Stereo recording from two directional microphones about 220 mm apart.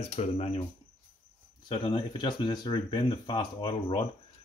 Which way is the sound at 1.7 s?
20° left (ahead or behind).